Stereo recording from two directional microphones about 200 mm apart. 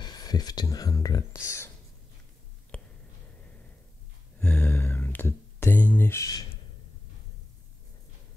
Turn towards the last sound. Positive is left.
turn(degrees=15)  # may be behind; listen again after turning